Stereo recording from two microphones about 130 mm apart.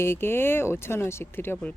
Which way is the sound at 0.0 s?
20° left (ahead or behind).